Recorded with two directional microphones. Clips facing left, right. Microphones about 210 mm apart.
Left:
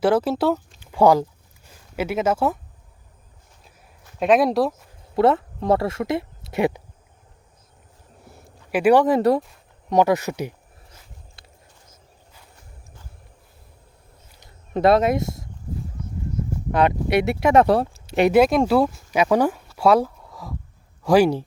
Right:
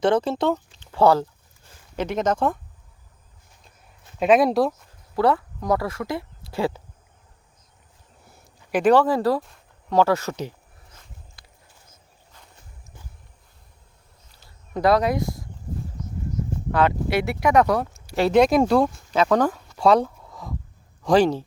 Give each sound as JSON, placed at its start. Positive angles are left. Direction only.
{"t": 0.0, "sound": "speech", "side_deg": 5}
{"t": 4.2, "sound": "speech", "side_deg": 0}
{"t": 5.1, "sound": "speech", "side_deg": 25}
{"t": 8.4, "sound": "speech", "side_deg": 5}
{"t": 11.4, "sound": "a sound", "side_deg": 25}
{"t": 14.3, "sound": "a sound", "side_deg": 20}
{"t": 16.7, "sound": "speech", "side_deg": 20}
{"t": 18.3, "sound": "speech", "side_deg": 5}